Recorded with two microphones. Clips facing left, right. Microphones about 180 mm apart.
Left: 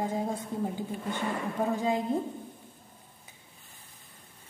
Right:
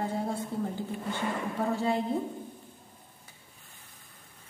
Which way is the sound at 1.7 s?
15° left (ahead or behind).